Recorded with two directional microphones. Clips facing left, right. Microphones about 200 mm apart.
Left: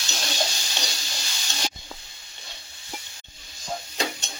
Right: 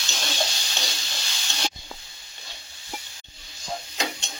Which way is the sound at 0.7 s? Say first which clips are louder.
Even; centre (ahead or behind).